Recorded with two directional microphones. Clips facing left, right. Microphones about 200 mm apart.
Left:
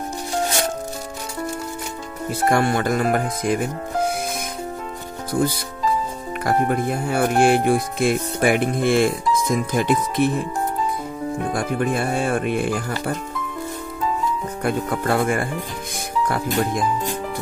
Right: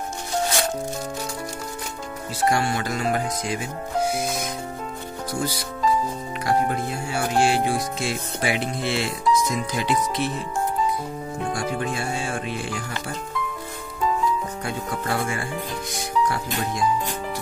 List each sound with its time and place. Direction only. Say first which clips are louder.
2.4 s speech: left 4 dB; 55° left (ahead or behind)
5.3 s speech: left 7 dB; 55° left (ahead or behind)
11.5 s speech: left 5 dB; 55° left (ahead or behind)
14.6 s speech: left 6 dB; 55° left (ahead or behind)